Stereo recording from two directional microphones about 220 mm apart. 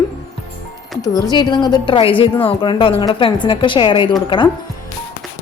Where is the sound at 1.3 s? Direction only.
20° left (ahead or behind).